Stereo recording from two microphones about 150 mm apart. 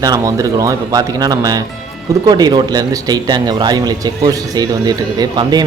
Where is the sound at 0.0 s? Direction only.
25° right (ahead or behind).